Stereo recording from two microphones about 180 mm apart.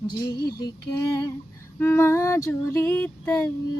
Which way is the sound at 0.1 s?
20° left (ahead or behind).